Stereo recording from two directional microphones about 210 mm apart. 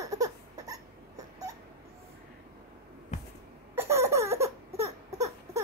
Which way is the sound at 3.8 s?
15° right (ahead or behind).